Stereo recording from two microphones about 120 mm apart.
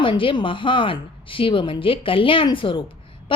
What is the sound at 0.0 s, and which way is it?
A woman's voice, 45° left (ahead or behind).